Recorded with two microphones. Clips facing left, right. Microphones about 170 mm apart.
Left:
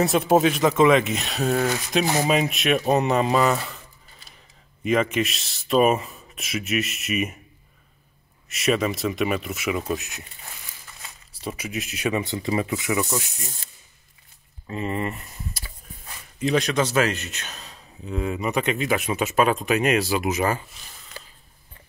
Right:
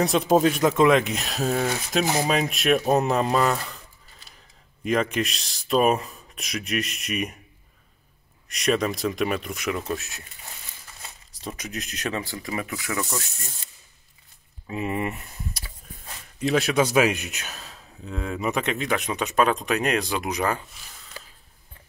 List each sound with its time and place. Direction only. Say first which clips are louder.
0.0 s speech: left 1 dB; 5° left (ahead or behind)
4.8 s speech: left 2 dB; centre (ahead or behind)
8.5 s speech: left 1 dB; 5° left (ahead or behind)
11.4 s speech: left 3 dB; 10° left (ahead or behind)
12.2 s speech: left 6 dB; 25° left (ahead or behind)
14.7 s speech: even; 10° right (ahead or behind)